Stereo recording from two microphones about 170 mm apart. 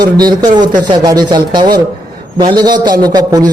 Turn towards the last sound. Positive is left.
turn(degrees=-25)  # may be behind; listen again after turning